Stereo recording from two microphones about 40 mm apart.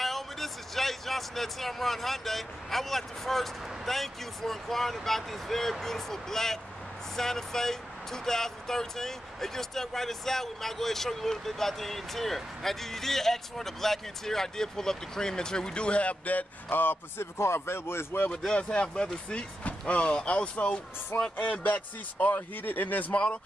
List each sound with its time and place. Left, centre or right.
0.0 s speech: centre; by 16.4 s left
16.6 s speech: left
17.2 s speech: left
18.5 s speech: left
21.4 s speech: left